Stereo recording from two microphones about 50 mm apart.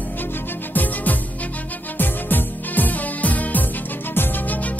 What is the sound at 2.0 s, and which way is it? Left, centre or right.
Music, left.